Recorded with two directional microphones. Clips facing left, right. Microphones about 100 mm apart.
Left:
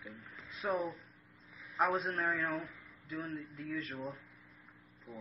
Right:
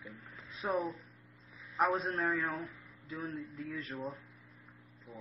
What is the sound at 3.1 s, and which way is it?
Speech, 30° right (ahead or behind).